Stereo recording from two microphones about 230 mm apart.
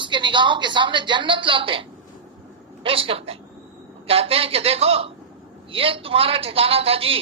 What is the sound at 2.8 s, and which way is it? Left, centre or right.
A woman's voice, right.